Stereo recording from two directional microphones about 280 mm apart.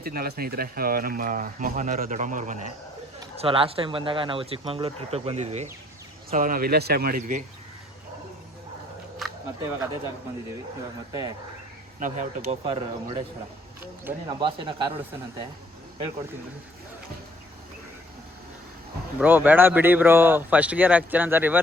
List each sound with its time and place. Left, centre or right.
0.0 s speech: right
9.1 s a sound: centre
11.1 s speech: centre
11.9 s speech: right
19.2 s speech: centre